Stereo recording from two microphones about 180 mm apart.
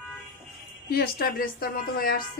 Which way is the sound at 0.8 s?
60° left (ahead or behind).